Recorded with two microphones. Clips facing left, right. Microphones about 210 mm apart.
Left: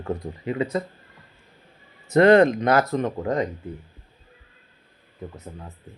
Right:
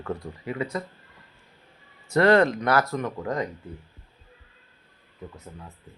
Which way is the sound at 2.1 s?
20° left (ahead or behind).